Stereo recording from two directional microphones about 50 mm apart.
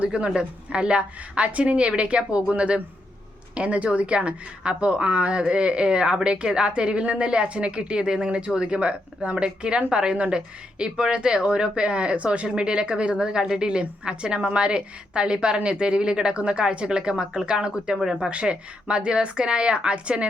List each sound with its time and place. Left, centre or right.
0.0 s a woman's voice: right
18.3 s a woman's voice: right